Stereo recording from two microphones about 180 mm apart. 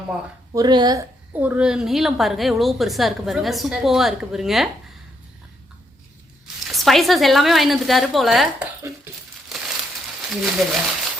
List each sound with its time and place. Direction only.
0.5 s speech: 25° right (ahead or behind)
1.3 s a woman's voice: 10° right (ahead or behind)
6.7 s a woman's voice: centre (ahead or behind)
10.2 s speech: centre (ahead or behind)